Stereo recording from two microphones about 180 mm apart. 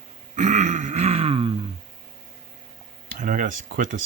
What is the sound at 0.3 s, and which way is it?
Grunt, 40° right (ahead or behind).